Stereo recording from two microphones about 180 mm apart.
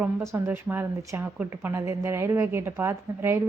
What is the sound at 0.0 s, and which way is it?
A woman's voice, 15° right (ahead or behind).